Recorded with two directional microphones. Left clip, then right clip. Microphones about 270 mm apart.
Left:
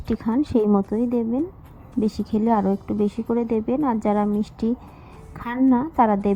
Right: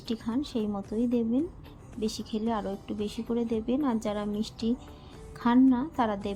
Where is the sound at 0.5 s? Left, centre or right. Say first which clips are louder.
Left 13 dB; left.